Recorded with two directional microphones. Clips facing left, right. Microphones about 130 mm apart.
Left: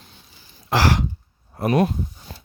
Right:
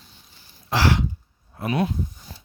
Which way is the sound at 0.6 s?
45° left (ahead or behind).